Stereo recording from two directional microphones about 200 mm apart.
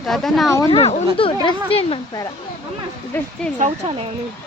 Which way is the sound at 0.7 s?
30° left (ahead or behind).